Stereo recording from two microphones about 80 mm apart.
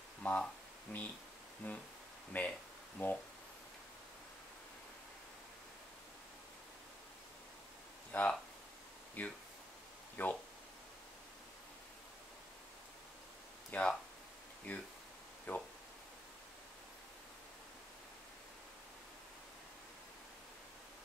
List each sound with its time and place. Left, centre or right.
0.2 s speech: centre
8.1 s speech: left
13.7 s speech: centre
15.5 s a sound: left